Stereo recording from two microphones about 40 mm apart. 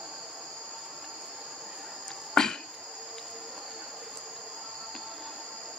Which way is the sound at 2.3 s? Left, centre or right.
Centre.